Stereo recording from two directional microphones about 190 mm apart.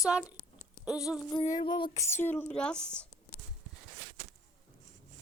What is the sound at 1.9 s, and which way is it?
Speech, 15° left (ahead or behind).